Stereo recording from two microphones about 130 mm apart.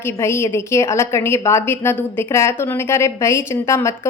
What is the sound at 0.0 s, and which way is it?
A woman's voice, 20° left (ahead or behind).